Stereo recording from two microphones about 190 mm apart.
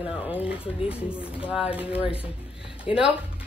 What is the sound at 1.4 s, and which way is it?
Speech, 30° left (ahead or behind).